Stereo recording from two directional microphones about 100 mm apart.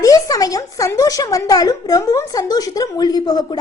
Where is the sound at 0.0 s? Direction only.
35° left (ahead or behind).